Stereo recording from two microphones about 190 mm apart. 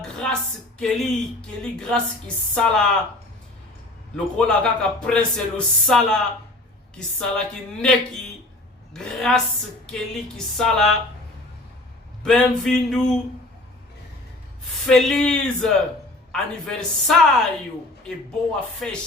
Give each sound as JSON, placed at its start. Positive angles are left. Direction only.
{"t": 0.0, "sound": "a sound", "side_deg": 5}
{"t": 0.8, "sound": "speech", "side_deg": 0}
{"t": 4.1, "sound": "speech", "side_deg": 5}
{"t": 12.2, "sound": "speech", "side_deg": 5}
{"t": 14.8, "sound": "speech", "side_deg": 0}
{"t": 18.8, "sound": "speech", "side_deg": 5}